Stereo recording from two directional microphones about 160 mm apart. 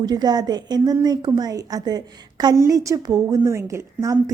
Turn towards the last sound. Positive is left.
turn(degrees=-20)  # may be behind; listen again after turning